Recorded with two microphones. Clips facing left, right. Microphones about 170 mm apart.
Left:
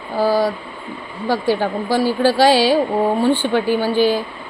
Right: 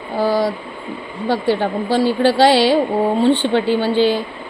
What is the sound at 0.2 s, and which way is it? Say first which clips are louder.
Speech: left 1 dB; 20° right (ahead or behind).